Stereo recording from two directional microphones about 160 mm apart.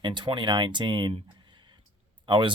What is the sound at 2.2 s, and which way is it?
Speech, 30° right (ahead or behind).